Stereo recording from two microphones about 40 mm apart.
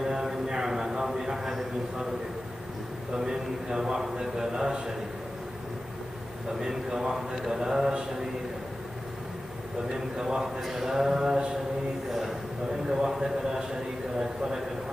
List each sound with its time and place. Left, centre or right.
0.0 s a sound: centre
3.2 s a man's voice: centre
6.6 s a man's voice: centre
9.9 s a man's voice: centre
12.1 s a sound: centre
12.9 s a man's voice: centre